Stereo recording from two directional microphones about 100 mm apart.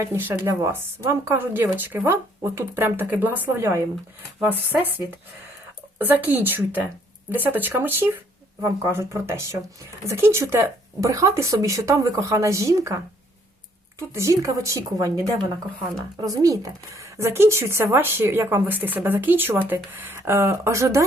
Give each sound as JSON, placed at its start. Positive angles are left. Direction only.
{"t": 0.0, "sound": "speech", "side_deg": -25}
{"t": 6.0, "sound": "speech", "side_deg": -20}
{"t": 14.1, "sound": "speech", "side_deg": -30}